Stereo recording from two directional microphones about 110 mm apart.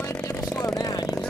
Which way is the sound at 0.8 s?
35° left (ahead or behind).